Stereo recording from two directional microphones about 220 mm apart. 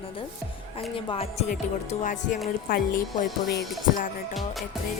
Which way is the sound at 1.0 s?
25° left (ahead or behind).